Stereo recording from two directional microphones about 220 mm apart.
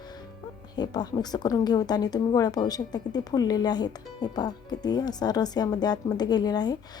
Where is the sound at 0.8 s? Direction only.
20° left (ahead or behind).